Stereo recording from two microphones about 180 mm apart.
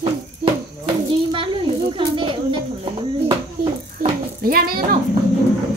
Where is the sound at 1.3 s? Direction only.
30° right (ahead or behind).